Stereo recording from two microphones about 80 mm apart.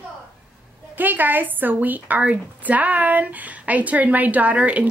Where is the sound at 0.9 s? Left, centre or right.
Right.